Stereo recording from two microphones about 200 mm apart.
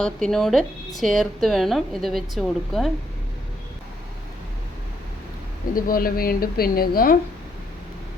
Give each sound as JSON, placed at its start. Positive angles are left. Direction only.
{"t": 0.0, "sound": "a woman's voice", "side_deg": 5}
{"t": 5.7, "sound": "speech", "side_deg": 45}